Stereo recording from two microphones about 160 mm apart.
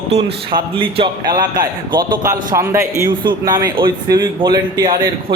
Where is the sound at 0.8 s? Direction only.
35° right (ahead or behind).